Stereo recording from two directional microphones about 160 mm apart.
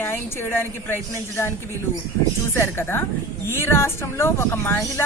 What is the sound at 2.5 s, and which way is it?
Speech, 15° left (ahead or behind).